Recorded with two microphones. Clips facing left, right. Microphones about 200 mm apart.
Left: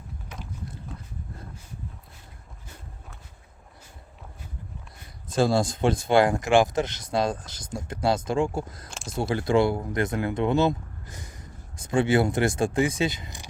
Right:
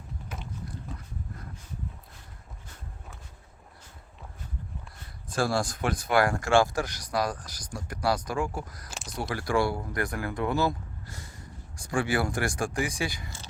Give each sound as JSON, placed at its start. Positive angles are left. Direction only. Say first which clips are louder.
{"t": 5.3, "sound": "speech", "louder": "left 5 dB", "side_deg": 20}
{"t": 8.9, "sound": "a sound", "louder": "left 3 dB", "side_deg": 0}
{"t": 9.3, "sound": "speech", "louder": "left 5 dB", "side_deg": 25}